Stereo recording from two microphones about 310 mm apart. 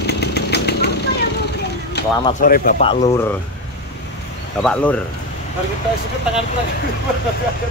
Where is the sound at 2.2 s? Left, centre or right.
Left.